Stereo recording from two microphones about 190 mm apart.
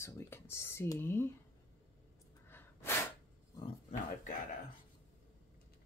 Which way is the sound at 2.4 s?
10° left (ahead or behind).